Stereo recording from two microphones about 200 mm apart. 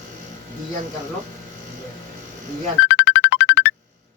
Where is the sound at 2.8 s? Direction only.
60° left (ahead or behind).